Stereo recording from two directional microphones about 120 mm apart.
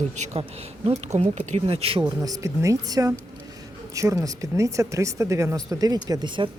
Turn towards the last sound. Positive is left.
turn(degrees=-40)  # may be behind; listen again after turning